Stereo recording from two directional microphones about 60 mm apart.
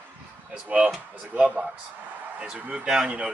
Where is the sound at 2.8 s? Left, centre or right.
Centre.